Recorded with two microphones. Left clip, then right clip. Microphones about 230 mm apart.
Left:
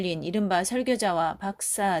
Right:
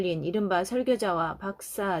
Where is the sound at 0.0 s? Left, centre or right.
Left.